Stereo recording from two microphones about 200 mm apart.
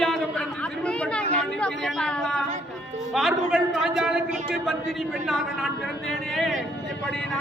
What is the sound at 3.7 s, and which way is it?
Speech, centre (ahead or behind).